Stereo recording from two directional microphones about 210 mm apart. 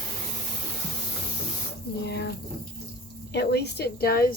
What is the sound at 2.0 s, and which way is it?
Speech, 50° left (ahead or behind).